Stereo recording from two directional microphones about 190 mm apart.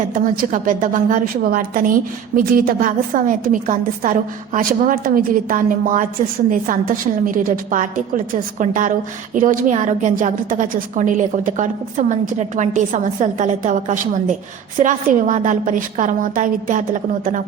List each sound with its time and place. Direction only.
0.1 s a woman's voice: 45° right (ahead or behind)